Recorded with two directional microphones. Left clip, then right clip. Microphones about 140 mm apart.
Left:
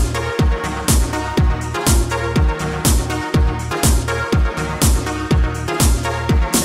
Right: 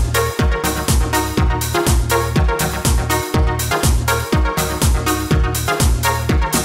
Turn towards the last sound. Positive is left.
turn(degrees=0)  # may be behind; listen again after turning